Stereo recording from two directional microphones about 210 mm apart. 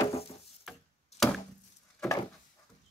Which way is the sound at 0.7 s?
Centre (ahead or behind).